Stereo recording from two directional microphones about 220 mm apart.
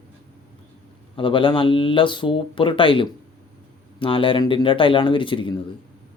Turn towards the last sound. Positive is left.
turn(degrees=25)  # may be behind; listen again after turning